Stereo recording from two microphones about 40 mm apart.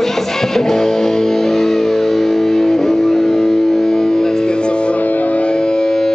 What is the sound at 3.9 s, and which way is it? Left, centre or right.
Music, centre.